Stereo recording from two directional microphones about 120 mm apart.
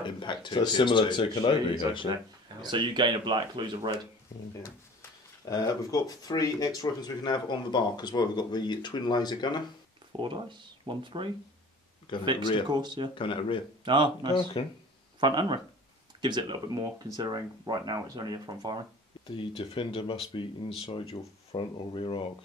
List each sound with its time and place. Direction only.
0.0 s speech: 40° left (ahead or behind)
2.6 s speech: 40° right (ahead or behind)
5.4 s speech: 30° left (ahead or behind)
10.2 s speech: 40° right (ahead or behind)
12.1 s speech: 45° left (ahead or behind)
12.6 s speech: 35° right (ahead or behind)
13.1 s speech: 45° left (ahead or behind)
13.8 s speech: 40° right (ahead or behind)
14.6 s speech: 45° left (ahead or behind)
15.1 s speech: 40° right (ahead or behind)
19.2 s speech: 45° left (ahead or behind)
20.9 s speech: 55° left (ahead or behind)